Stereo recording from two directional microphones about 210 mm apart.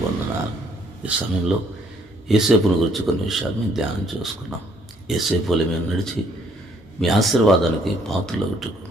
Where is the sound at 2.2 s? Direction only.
Centre (ahead or behind).